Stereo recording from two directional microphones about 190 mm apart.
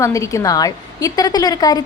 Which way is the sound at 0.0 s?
15° left (ahead or behind).